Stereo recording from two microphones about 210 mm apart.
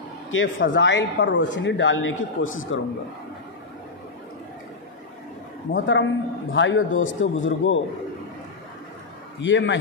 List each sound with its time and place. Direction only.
0.3 s speech: 65° left (ahead or behind)
5.7 s speech: 65° left (ahead or behind)
9.4 s speech: 60° left (ahead or behind)